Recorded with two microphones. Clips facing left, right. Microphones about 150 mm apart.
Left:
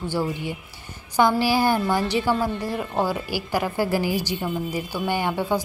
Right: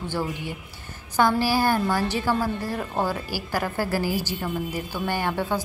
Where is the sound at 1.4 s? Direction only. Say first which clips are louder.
Left 1 dB; 15° left (ahead or behind).